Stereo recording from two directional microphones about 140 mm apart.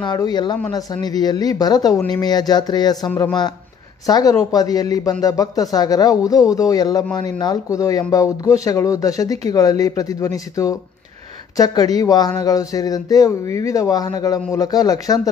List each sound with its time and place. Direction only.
0.0 s speech: 30° left (ahead or behind)
4.0 s speech: 25° left (ahead or behind)